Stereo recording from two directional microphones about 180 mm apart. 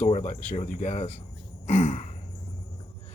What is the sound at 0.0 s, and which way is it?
A man's voice, 40° left (ahead or behind).